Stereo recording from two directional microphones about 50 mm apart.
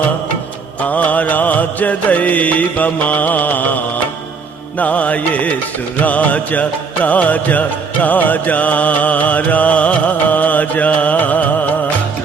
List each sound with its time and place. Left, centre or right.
0.8 s music: left
4.8 s music: left